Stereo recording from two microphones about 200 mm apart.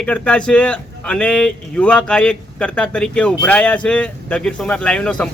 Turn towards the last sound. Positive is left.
turn(degrees=5)  # may be behind; listen again after turning